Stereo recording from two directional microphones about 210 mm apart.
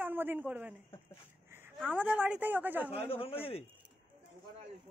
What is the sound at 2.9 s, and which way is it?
Speech, 25° left (ahead or behind).